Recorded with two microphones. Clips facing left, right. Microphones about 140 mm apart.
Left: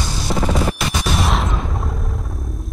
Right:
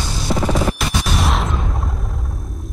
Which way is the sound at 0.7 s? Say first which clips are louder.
Even; centre (ahead or behind).